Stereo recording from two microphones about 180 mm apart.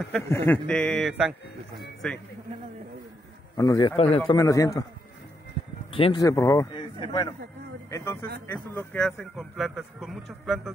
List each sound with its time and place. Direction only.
0.3 s speech: 10° left (ahead or behind)
3.5 s a man's voice: 20° left (ahead or behind)
3.9 s speech: 35° left (ahead or behind)
4.3 s a man's voice: 20° left (ahead or behind)
5.9 s speech: 30° left (ahead or behind)
6.2 s speech: 15° left (ahead or behind)
6.7 s speech: 25° left (ahead or behind)
7.9 s speech: 15° left (ahead or behind); by 10.7 s centre (ahead or behind)